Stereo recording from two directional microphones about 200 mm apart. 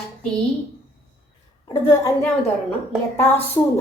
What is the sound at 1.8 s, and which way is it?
Speech, 15° left (ahead or behind).